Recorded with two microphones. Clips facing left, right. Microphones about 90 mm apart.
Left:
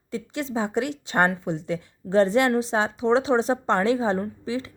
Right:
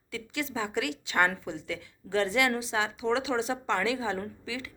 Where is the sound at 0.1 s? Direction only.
35° left (ahead or behind).